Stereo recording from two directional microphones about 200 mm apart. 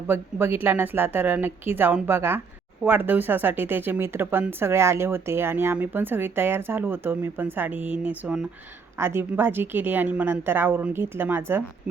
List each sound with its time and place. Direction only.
0.1 s speech: 10° right (ahead or behind)